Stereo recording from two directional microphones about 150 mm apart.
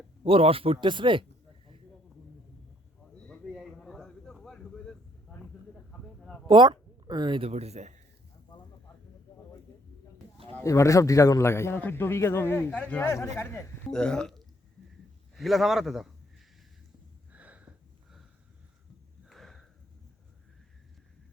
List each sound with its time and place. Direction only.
0.3 s speech: 40° right (ahead or behind)
3.2 s a sound: centre (ahead or behind)
6.5 s speech: 30° right (ahead or behind); by 8.0 s 50° right (ahead or behind)
10.6 s a man's voice: 20° left (ahead or behind)
13.9 s a man's voice: 5° left (ahead or behind)
17.3 s a sound: 10° right (ahead or behind)
19.2 s sniff: centre (ahead or behind)